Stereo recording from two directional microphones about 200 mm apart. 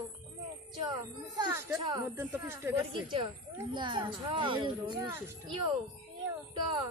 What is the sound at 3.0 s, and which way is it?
Speech, 25° right (ahead or behind).